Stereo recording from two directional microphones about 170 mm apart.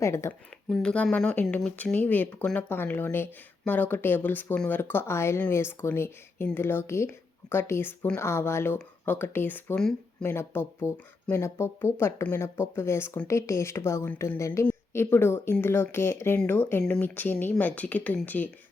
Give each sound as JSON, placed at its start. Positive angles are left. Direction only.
{"t": 0.0, "sound": "speech", "side_deg": 15}
{"t": 0.7, "sound": "speech", "side_deg": 5}